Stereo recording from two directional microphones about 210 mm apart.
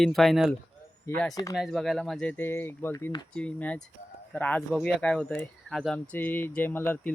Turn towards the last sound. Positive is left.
turn(degrees=10)  # may be behind; listen again after turning